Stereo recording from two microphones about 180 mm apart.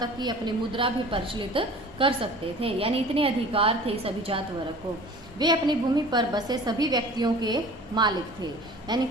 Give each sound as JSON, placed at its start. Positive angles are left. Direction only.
{"t": 0.0, "sound": "a woman's voice", "side_deg": -25}